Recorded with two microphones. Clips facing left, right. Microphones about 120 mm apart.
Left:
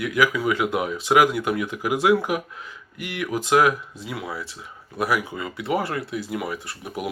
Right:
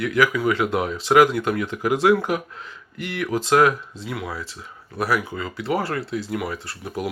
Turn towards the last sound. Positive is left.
turn(degrees=20)  # may be behind; listen again after turning